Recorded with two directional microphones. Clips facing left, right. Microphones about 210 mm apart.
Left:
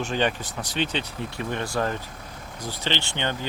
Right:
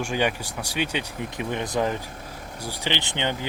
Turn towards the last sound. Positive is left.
turn(degrees=-15)  # may be behind; listen again after turning